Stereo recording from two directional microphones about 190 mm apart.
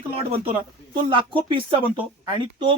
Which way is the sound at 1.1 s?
25° right (ahead or behind).